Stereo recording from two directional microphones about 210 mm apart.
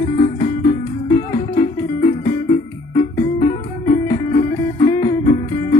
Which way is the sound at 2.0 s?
35° left (ahead or behind).